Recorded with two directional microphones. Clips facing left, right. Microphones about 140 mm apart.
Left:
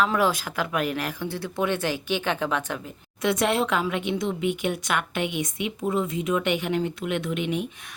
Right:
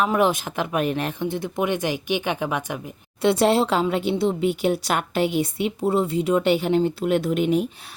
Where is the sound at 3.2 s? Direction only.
30° right (ahead or behind).